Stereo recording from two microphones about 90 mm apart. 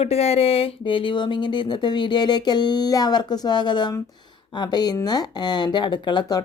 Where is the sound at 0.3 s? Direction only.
90° left.